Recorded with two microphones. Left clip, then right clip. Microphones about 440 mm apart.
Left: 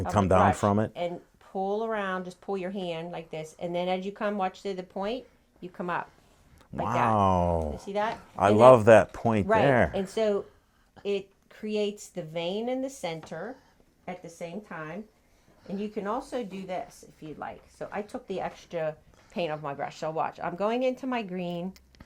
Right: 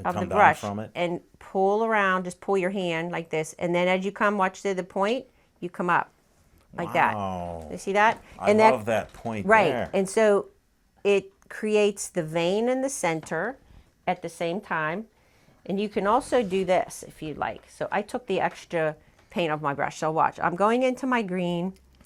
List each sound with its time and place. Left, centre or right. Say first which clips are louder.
0.1 s speech: right 3 dB; left
0.9 s a woman's voice: right 5 dB; right
7.2 s speech: left 7 dB; left
7.8 s speech: right 9 dB; right
8.4 s speech: left 1 dB; left
8.7 s speech: left 9 dB; left
9.9 s a woman's voice: right 6 dB; right
14.0 s a woman's voice: right 11 dB; right